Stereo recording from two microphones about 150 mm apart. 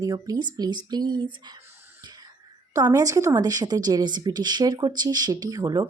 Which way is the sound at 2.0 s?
25° right (ahead or behind).